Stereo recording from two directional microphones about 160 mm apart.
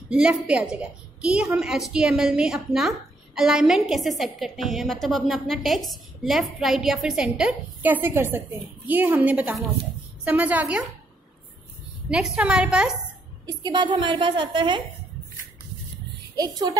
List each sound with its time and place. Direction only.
0.1 s a woman's voice: 5° right (ahead or behind)
12.1 s a woman's voice: 5° right (ahead or behind)
13.5 s a woman's voice: 25° right (ahead or behind)
16.3 s a woman's voice: 25° right (ahead or behind)